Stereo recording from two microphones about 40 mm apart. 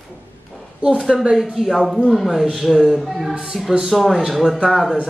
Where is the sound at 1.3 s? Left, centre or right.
Centre.